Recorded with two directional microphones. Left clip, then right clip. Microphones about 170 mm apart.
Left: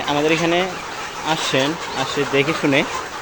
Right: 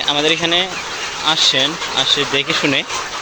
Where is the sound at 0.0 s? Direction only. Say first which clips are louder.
Right 2 dB; 5° left (ahead or behind).